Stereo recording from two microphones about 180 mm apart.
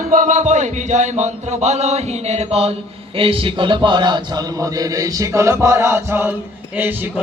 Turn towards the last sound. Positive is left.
turn(degrees=-10)  # may be behind; listen again after turning